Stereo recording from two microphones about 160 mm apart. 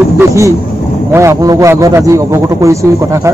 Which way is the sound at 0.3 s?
20° right (ahead or behind).